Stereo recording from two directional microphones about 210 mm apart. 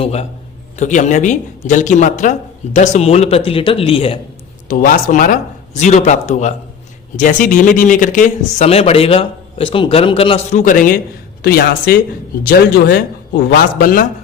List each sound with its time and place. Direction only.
0.0 s speech: 30° left (ahead or behind)
4.7 s a man's voice: 40° left (ahead or behind)